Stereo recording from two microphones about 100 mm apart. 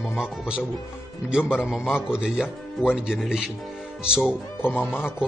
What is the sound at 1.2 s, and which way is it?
Speech, 10° right (ahead or behind).